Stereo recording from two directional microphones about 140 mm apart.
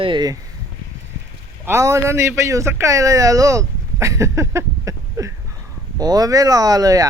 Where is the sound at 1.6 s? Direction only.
20° right (ahead or behind).